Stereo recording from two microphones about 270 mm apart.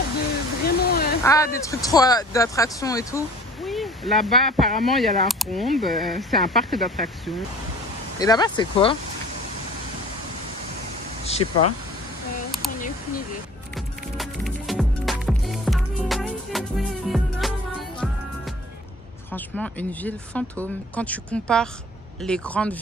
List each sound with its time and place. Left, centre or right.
0.7 s a sound: left
1.2 s speech: centre
3.6 s speech: centre
8.2 s speech: centre
11.2 s speech: left
13.7 s music: centre
19.3 s speech: centre